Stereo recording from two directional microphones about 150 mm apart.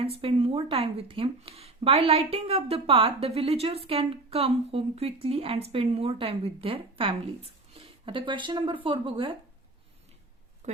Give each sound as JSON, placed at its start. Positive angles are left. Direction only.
{"t": 0.0, "sound": "a woman's voice", "side_deg": -40}